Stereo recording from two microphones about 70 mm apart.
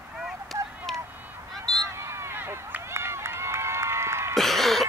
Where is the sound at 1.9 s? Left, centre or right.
Right.